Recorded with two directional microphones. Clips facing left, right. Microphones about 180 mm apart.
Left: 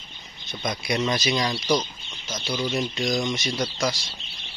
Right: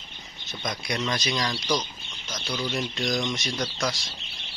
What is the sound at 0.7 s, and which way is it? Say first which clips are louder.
Speech: left 4 dB; 5° left (ahead or behind).